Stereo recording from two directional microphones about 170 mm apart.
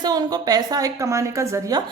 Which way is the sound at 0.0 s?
25° right (ahead or behind).